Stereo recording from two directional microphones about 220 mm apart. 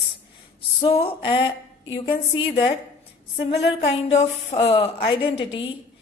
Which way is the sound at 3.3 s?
25° left (ahead or behind).